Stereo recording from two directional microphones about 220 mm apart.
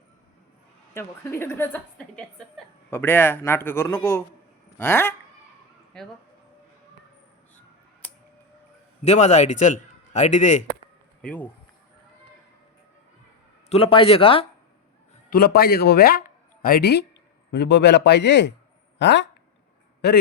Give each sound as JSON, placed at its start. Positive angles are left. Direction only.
{"t": 0.9, "sound": "a woman's voice", "side_deg": 10}
{"t": 8.0, "sound": "a sound", "side_deg": 5}
{"t": 9.0, "sound": "a man's voice", "side_deg": 30}
{"t": 11.2, "sound": "speech", "side_deg": 5}
{"t": 13.7, "sound": "speech", "side_deg": 25}
{"t": 15.3, "sound": "a man's voice", "side_deg": 45}